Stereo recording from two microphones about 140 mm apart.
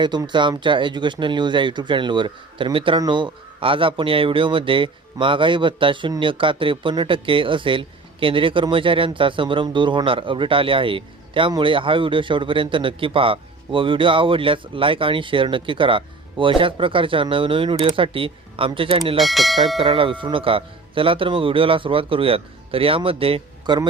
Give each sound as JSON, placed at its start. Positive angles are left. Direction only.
{"t": 0.0, "sound": "a man's voice", "side_deg": -30}
{"t": 19.1, "sound": "speech", "side_deg": 0}
{"t": 19.8, "sound": "a man's voice", "side_deg": -40}